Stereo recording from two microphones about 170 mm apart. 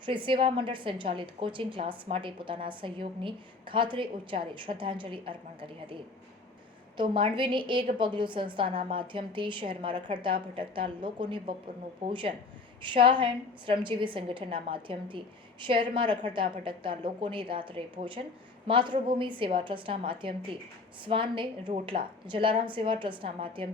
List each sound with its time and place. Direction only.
0.0 s a woman's voice: 30° right (ahead or behind)